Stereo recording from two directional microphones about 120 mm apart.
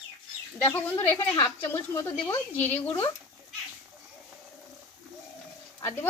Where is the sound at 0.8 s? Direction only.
25° left (ahead or behind).